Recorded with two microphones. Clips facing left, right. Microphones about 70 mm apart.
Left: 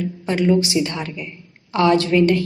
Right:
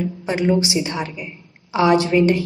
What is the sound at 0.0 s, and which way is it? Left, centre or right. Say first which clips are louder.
A woman's voice: left 1 dB; centre.